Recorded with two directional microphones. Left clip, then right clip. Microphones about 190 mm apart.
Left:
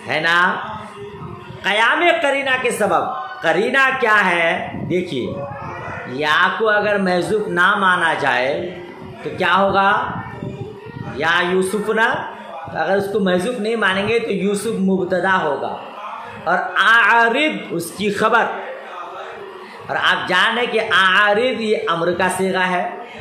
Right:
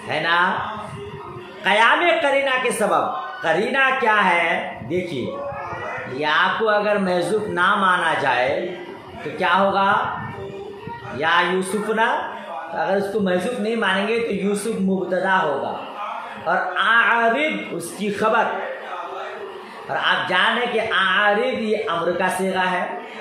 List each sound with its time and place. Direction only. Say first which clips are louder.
0.1 s speech: left 3 dB; 35° left (ahead or behind)
1.6 s a woman's voice: left 1 dB; 35° left (ahead or behind)
6.1 s speech: left 3 dB; 35° left (ahead or behind)
9.4 s speech: left 3 dB; 35° left (ahead or behind)
11.1 s speech: left 2 dB; 35° left (ahead or behind)
16.4 s speech: left 4 dB; 45° left (ahead or behind)
19.9 s speech: left 3 dB; 40° left (ahead or behind)